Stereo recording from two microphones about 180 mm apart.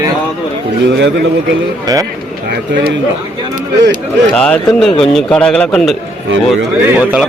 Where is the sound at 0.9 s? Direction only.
75° right (ahead or behind).